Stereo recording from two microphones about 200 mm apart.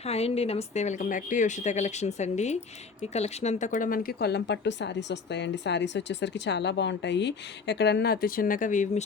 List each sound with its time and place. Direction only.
0.1 s a woman's voice: 30° left (ahead or behind)